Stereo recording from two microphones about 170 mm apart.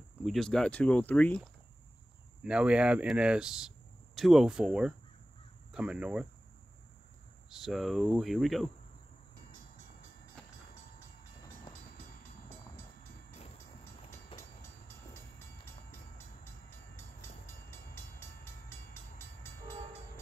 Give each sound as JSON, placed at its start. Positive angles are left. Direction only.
{"t": 0.2, "sound": "speech", "side_deg": 0}
{"t": 2.4, "sound": "speech", "side_deg": -5}
{"t": 7.4, "sound": "speech", "side_deg": 0}
{"t": 10.4, "sound": "vehicle", "side_deg": 5}
{"t": 15.3, "sound": "train", "side_deg": 15}